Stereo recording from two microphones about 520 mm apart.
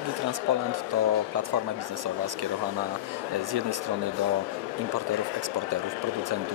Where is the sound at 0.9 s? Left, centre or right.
Right.